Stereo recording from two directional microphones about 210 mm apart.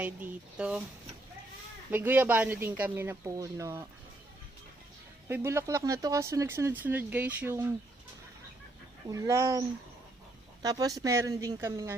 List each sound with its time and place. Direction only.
0.0 s speech: 5° right (ahead or behind)
1.9 s speech: 10° right (ahead or behind)
5.3 s speech: 10° right (ahead or behind)
9.0 s speech: 15° right (ahead or behind)